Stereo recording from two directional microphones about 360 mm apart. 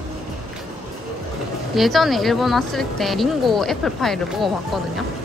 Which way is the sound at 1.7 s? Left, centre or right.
Centre.